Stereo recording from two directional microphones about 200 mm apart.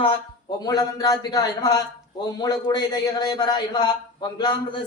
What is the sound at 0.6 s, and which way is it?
A man's voice, 20° left (ahead or behind).